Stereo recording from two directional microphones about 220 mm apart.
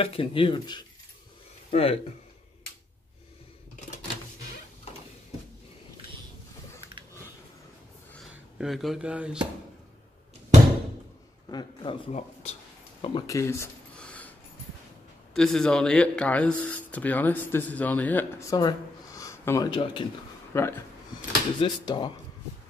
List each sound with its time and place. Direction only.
0.0 s speech: 25° left (ahead or behind)
8.1 s speech: centre (ahead or behind)
11.5 s speech: 25° left (ahead or behind)
13.0 s a sound: 20° left (ahead or behind)
15.3 s speech: 5° left (ahead or behind); by 22.1 s 20° left (ahead or behind)